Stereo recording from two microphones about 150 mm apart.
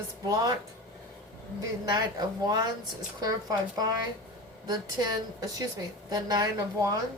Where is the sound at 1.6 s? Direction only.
30° right (ahead or behind).